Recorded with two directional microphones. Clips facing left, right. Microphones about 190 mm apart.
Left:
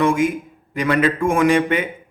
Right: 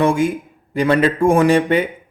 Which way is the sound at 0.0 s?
30° right (ahead or behind).